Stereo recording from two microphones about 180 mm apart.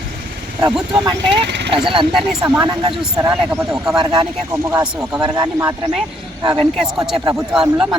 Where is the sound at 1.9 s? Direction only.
30° right (ahead or behind).